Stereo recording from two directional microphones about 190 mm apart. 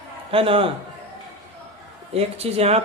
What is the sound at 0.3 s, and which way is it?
Speech, 30° right (ahead or behind).